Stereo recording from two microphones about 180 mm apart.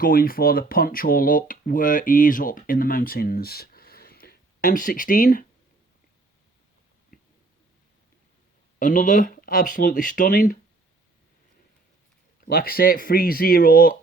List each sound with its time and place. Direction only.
0.0 s speech: 55° left (ahead or behind)
8.8 s speech: 50° left (ahead or behind)
12.5 s speech: 55° left (ahead or behind)